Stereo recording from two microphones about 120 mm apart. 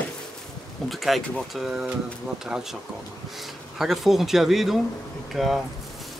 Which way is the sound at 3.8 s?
Centre (ahead or behind).